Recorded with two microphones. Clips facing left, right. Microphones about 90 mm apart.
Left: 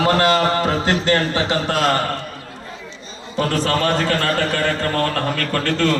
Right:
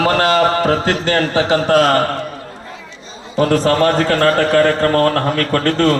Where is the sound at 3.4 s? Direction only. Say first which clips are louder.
Right 6 dB; 40° right (ahead or behind).